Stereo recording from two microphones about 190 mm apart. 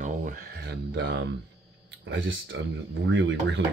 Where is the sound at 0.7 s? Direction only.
65° right (ahead or behind).